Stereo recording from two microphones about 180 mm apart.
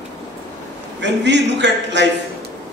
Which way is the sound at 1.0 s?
75° right (ahead or behind).